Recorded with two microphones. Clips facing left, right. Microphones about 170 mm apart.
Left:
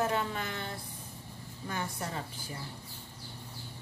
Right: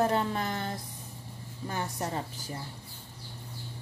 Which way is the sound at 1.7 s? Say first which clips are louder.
Right 3 dB; 40° right (ahead or behind).